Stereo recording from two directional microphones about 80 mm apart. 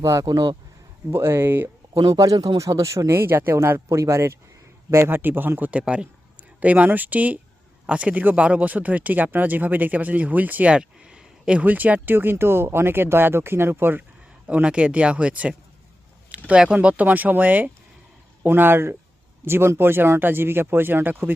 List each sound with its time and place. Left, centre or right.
0.0 s speech: right
0.3 s speech: right
1.1 s speech: right
2.0 s a man's voice: right
14.4 s speech: centre